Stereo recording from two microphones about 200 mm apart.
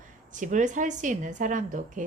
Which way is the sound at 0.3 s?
40° right (ahead or behind).